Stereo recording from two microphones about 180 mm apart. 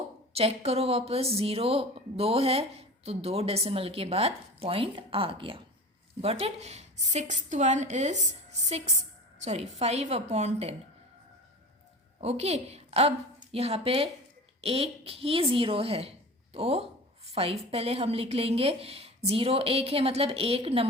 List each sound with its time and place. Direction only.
0.3 s a woman's voice: 35° right (ahead or behind)
12.2 s a woman's voice: 35° right (ahead or behind)